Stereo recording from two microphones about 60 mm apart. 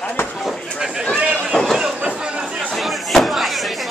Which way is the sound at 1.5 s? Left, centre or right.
Centre.